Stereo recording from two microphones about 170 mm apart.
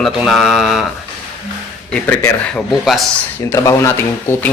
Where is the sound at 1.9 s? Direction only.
10° left (ahead or behind).